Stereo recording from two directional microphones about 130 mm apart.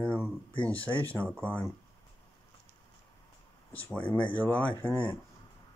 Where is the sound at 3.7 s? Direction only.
10° left (ahead or behind).